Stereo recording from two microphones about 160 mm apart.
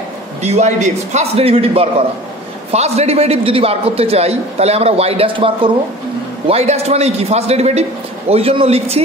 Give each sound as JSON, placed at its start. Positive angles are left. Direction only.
{"t": 0.4, "sound": "a man's voice", "side_deg": -45}